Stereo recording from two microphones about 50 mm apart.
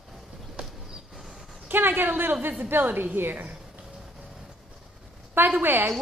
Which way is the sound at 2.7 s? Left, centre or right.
Right.